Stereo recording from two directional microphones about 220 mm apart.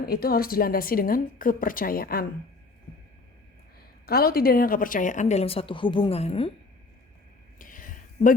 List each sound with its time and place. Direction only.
0.1 s a woman's voice: 40° left (ahead or behind)
4.0 s a woman's voice: 45° left (ahead or behind); by 6.5 s 25° left (ahead or behind)
7.6 s whispering: 40° left (ahead or behind)